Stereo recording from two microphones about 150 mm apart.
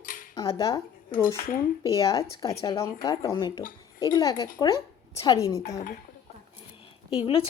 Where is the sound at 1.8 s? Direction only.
25° left (ahead or behind).